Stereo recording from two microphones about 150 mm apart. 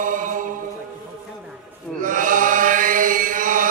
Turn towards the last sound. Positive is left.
turn(degrees=-60)  # may be behind; listen again after turning